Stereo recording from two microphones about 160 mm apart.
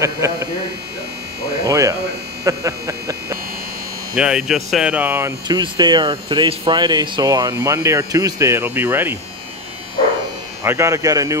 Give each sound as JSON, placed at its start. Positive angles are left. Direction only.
{"t": 0.0, "sound": "speech", "side_deg": -20}
{"t": 1.7, "sound": "speech", "side_deg": -20}
{"t": 4.1, "sound": "speech", "side_deg": -5}
{"t": 5.6, "sound": "speech", "side_deg": -25}
{"t": 10.6, "sound": "speech", "side_deg": -15}